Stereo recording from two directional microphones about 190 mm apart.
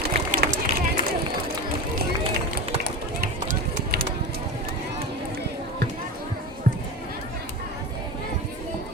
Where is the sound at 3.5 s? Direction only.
45° right (ahead or behind).